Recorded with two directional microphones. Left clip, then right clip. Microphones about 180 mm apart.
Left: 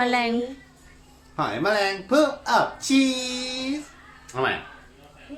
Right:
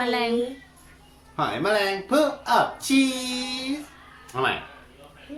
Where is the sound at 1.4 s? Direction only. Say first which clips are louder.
Even; 10° left (ahead or behind).